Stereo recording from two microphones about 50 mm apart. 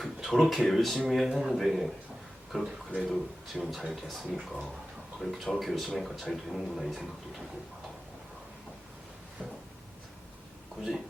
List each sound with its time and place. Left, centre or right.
0.0 s speech: centre
3.1 s speech: centre
9.4 s a sound: centre